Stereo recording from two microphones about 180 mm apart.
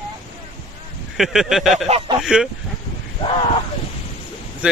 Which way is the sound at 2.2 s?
5° right (ahead or behind).